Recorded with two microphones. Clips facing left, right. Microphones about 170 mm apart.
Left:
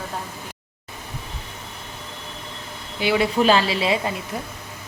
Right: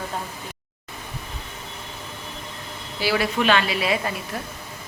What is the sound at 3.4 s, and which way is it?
Speech, 30° left (ahead or behind).